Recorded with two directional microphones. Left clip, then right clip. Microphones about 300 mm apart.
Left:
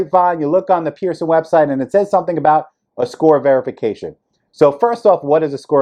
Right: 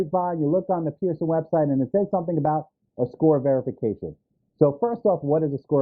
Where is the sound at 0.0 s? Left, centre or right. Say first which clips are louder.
Left 10 dB; centre.